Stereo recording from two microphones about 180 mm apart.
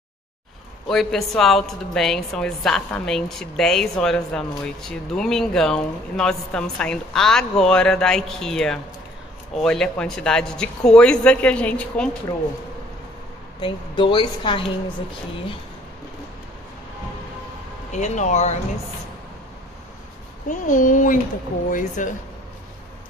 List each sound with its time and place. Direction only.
0.8 s a woman's voice: centre (ahead or behind)
13.6 s a woman's voice: 30° left (ahead or behind)
17.9 s speech: 40° left (ahead or behind)
20.4 s speech: 45° left (ahead or behind)